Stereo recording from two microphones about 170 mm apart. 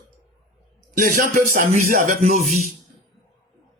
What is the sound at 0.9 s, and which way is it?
Speech, 55° right (ahead or behind).